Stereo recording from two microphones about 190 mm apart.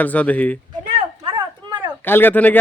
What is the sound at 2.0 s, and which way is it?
Speech, 10° left (ahead or behind).